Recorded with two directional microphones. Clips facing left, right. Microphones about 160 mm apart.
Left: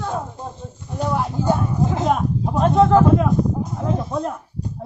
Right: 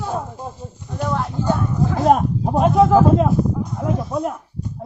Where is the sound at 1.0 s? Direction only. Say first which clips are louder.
Left 1 dB; 15° left (ahead or behind).